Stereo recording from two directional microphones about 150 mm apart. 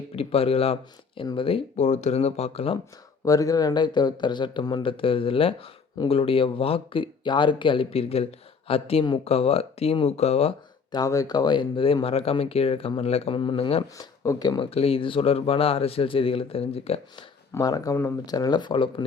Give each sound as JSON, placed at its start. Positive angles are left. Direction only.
{"t": 0.2, "sound": "speech", "side_deg": 40}
{"t": 3.2, "sound": "speech", "side_deg": 25}
{"t": 10.9, "sound": "speech", "side_deg": 25}
{"t": 14.0, "sound": "speech", "side_deg": 25}
{"t": 14.7, "sound": "speech", "side_deg": 40}
{"t": 17.5, "sound": "speech", "side_deg": 25}